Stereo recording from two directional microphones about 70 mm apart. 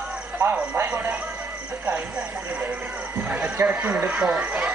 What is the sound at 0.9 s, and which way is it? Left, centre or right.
Speech, right.